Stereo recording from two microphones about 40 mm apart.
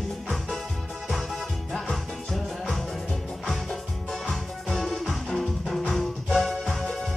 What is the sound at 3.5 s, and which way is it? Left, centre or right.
Music, centre.